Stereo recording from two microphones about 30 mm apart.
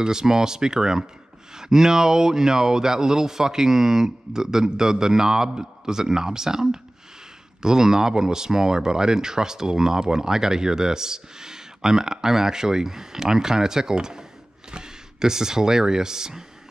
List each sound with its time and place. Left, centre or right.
0.0 s speech: right